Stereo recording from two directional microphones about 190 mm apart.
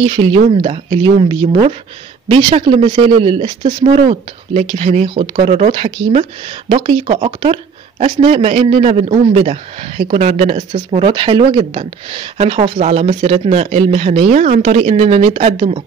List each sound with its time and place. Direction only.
0.0 s speech: 30° right (ahead or behind)